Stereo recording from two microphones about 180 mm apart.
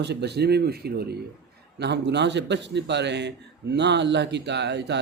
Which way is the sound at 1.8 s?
70° right (ahead or behind).